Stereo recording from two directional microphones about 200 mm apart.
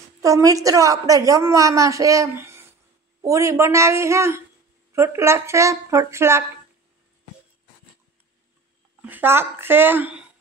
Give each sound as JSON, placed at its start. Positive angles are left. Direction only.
{"t": 0.2, "sound": "a woman's voice", "side_deg": -15}
{"t": 9.0, "sound": "speech", "side_deg": -10}